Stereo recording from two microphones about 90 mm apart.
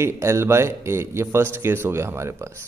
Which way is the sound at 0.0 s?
30° right (ahead or behind).